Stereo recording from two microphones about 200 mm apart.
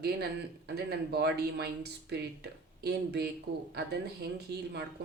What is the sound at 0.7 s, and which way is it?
Speech, 55° right (ahead or behind).